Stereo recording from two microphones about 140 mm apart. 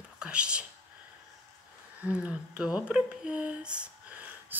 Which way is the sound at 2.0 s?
10° right (ahead or behind).